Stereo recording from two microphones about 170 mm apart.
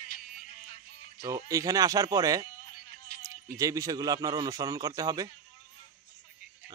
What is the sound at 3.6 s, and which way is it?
Speech, 20° right (ahead or behind).